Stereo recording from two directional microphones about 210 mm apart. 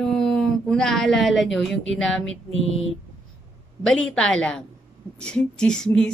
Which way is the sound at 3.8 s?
5° left (ahead or behind).